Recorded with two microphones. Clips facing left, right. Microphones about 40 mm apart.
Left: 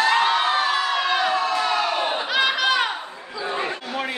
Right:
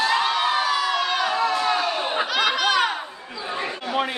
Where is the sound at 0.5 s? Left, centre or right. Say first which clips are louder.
Left 1 dB; left.